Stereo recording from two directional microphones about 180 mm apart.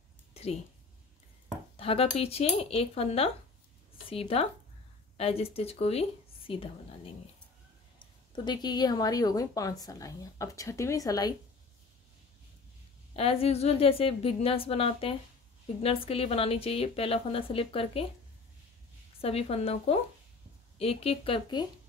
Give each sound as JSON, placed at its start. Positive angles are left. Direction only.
{"t": 0.3, "sound": "a sound", "side_deg": 35}
{"t": 1.8, "sound": "a woman's voice", "side_deg": 30}
{"t": 8.5, "sound": "a woman's voice", "side_deg": 25}
{"t": 13.1, "sound": "a woman's voice", "side_deg": 35}
{"t": 19.2, "sound": "a woman's voice", "side_deg": 35}